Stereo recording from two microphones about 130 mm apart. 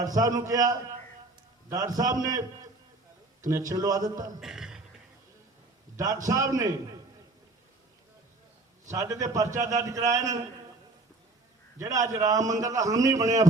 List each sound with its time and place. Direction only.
0.0 s a man's voice: 25° right (ahead or behind)
3.5 s a man's voice: 25° right (ahead or behind)
4.4 s speech: 5° right (ahead or behind)
6.2 s a man's voice: 25° right (ahead or behind)
8.9 s a man's voice: 25° right (ahead or behind)
11.8 s a man's voice: 25° right (ahead or behind)